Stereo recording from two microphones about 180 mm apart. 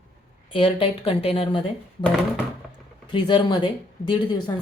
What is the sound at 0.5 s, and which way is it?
Speech, 30° left (ahead or behind).